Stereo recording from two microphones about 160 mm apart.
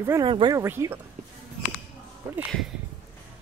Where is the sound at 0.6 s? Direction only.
15° right (ahead or behind).